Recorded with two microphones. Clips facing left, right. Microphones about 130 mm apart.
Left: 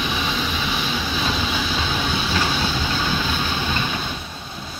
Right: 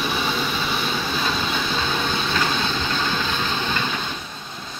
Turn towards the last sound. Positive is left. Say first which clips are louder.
# even
turn(degrees=10)  # may be behind; listen again after turning